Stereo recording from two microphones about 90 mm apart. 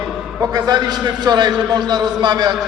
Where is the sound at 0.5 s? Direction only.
50° right (ahead or behind).